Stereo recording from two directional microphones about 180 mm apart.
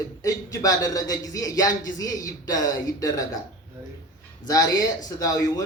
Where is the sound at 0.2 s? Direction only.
20° left (ahead or behind).